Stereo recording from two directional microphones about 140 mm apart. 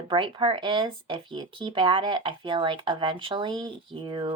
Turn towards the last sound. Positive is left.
turn(degrees=-35)  # may be behind; listen again after turning